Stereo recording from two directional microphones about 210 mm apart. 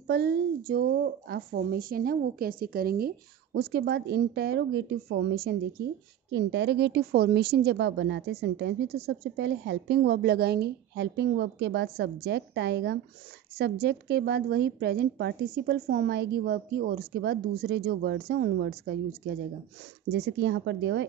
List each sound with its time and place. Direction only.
0.0 s a woman's voice: 50° right (ahead or behind)
6.3 s a woman's voice: 55° right (ahead or behind)
20.1 s speech: 55° right (ahead or behind)